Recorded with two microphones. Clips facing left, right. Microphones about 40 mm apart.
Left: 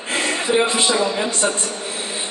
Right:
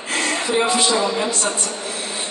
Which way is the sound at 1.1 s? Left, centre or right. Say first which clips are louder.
Left 1 dB; centre.